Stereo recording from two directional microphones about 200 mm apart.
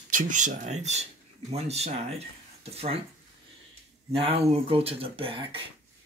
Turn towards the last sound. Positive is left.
turn(degrees=-25)  # may be behind; listen again after turning